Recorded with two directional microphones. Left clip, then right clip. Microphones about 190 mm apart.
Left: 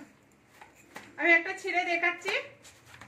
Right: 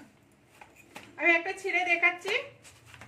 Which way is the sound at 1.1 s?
20° left (ahead or behind).